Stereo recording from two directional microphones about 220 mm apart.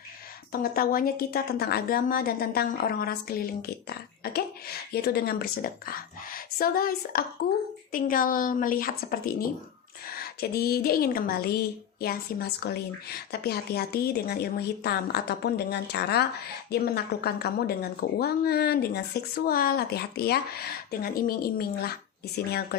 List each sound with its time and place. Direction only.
0.5 s a woman's voice: 40° left (ahead or behind)